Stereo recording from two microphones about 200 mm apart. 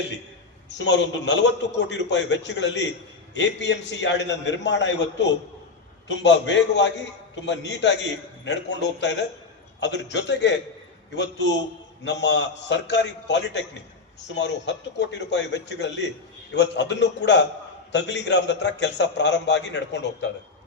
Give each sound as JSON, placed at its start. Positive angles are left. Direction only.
{"t": 0.7, "sound": "a man's voice", "side_deg": 60}